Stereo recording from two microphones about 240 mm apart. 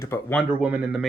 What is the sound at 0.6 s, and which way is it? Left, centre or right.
Speech, centre.